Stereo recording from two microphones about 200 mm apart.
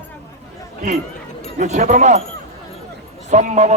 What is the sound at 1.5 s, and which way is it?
Speech, 40° right (ahead or behind).